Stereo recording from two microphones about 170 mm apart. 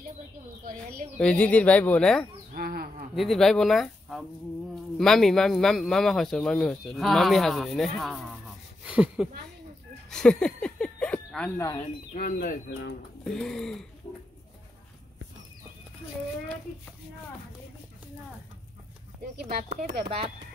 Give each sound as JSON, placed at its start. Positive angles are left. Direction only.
{"t": 1.1, "sound": "speech", "side_deg": 5}
{"t": 2.5, "sound": "bird", "side_deg": -60}
{"t": 3.2, "sound": "speech", "side_deg": 0}
{"t": 10.0, "sound": "a sound", "side_deg": 5}
{"t": 12.1, "sound": "speech", "side_deg": 50}
{"t": 13.2, "sound": "speech", "side_deg": 5}
{"t": 19.5, "sound": "speech", "side_deg": -55}